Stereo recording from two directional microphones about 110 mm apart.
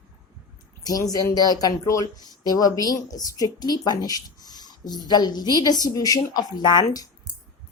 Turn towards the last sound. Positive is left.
turn(degrees=40)  # may be behind; listen again after turning